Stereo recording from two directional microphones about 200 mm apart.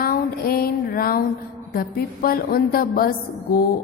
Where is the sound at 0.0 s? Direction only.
50° left (ahead or behind).